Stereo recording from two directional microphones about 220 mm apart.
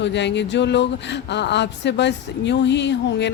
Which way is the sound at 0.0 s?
55° left (ahead or behind).